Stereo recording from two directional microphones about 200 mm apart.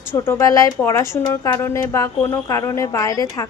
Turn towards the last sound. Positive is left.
turn(degrees=15)  # may be behind; listen again after turning